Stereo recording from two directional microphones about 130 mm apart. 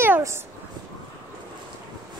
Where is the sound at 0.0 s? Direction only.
20° right (ahead or behind).